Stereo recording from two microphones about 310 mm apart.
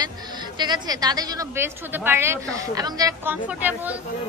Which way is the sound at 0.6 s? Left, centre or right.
Centre.